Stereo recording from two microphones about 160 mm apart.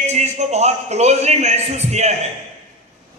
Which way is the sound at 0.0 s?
45° right (ahead or behind).